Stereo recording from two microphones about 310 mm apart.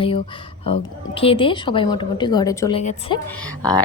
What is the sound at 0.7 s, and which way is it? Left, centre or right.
A woman's voice, centre.